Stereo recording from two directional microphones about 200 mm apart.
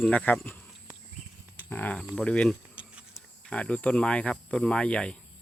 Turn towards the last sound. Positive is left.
turn(degrees=5)  # may be behind; listen again after turning